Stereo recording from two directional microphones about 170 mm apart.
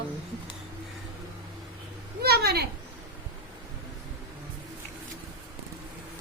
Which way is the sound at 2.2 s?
70° right (ahead or behind).